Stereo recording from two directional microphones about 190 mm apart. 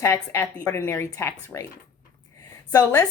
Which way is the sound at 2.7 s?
15° left (ahead or behind).